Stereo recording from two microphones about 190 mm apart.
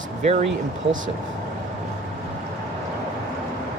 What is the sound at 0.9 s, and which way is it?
Speech, 90° right.